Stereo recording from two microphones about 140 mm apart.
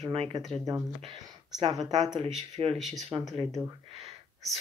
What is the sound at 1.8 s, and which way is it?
Speech, 30° right (ahead or behind).